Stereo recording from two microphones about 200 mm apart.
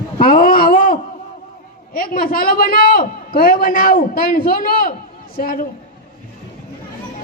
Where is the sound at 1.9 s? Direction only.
45° left (ahead or behind).